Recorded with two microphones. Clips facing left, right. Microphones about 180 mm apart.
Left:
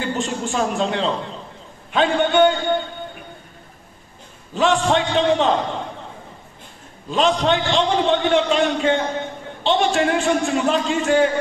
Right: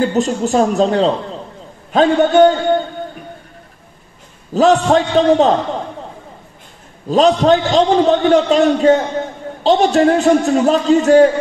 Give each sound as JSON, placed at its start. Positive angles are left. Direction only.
{"t": 0.0, "sound": "a man's voice", "side_deg": -40}
{"t": 4.6, "sound": "a man's voice", "side_deg": -40}
{"t": 7.1, "sound": "a man's voice", "side_deg": -40}